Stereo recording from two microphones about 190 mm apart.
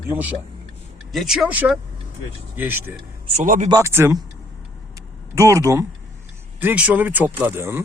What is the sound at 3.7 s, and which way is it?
Speech, 15° right (ahead or behind).